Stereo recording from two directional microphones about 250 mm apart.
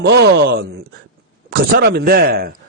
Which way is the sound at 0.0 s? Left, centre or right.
Right.